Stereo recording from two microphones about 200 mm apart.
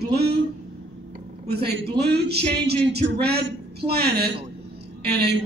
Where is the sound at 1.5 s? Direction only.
55° right (ahead or behind).